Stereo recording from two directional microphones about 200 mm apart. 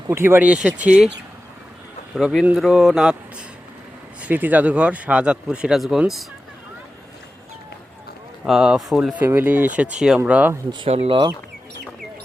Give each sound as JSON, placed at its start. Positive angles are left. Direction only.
{"t": 0.1, "sound": "speech", "side_deg": -10}
{"t": 2.1, "sound": "speech", "side_deg": 0}
{"t": 4.2, "sound": "speech", "side_deg": -10}
{"t": 8.4, "sound": "speech", "side_deg": -5}
{"t": 10.7, "sound": "speech", "side_deg": -30}